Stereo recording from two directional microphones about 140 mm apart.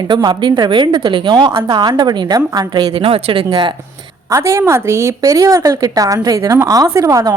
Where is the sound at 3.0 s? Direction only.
40° right (ahead or behind).